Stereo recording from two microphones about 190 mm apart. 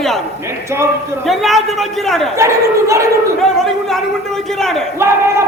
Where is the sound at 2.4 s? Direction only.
15° right (ahead or behind).